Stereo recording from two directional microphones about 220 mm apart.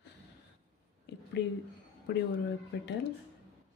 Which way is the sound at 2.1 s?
50° left (ahead or behind).